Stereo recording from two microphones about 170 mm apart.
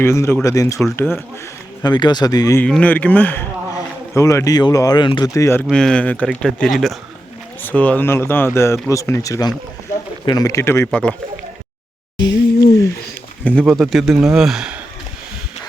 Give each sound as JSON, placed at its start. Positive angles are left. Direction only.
{"t": 0.0, "sound": "speech", "side_deg": 15}
{"t": 1.8, "sound": "speech", "side_deg": 25}
{"t": 2.6, "sound": "speech", "side_deg": 5}
{"t": 5.6, "sound": "speech", "side_deg": 5}
{"t": 12.1, "sound": "speech", "side_deg": 25}
{"t": 13.4, "sound": "speech", "side_deg": 0}